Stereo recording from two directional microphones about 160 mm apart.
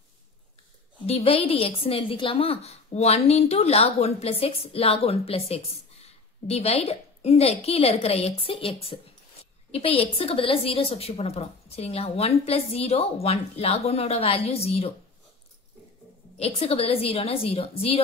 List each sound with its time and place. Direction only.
1.0 s a woman's voice: 40° left (ahead or behind)
16.3 s a woman's voice: 40° left (ahead or behind)